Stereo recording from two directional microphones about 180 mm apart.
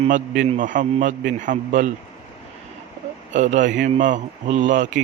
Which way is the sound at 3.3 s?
40° right (ahead or behind).